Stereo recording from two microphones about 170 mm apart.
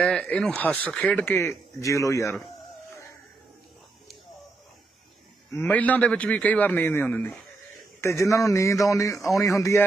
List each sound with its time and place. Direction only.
0.0 s speech: 5° left (ahead or behind)
5.5 s speech: 10° left (ahead or behind)